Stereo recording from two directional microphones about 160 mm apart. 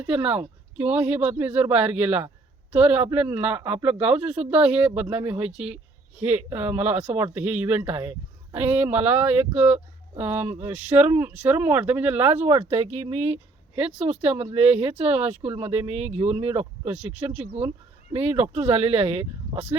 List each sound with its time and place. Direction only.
0.0 s speech: 5° right (ahead or behind)
12.3 s speech: 40° right (ahead or behind)